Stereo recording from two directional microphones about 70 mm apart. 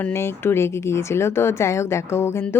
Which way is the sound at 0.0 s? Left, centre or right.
Left.